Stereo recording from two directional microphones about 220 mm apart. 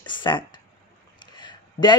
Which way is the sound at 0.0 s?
20° left (ahead or behind).